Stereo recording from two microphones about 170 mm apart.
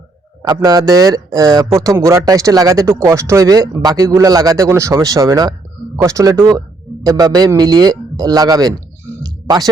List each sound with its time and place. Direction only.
0.4 s speech: 20° right (ahead or behind)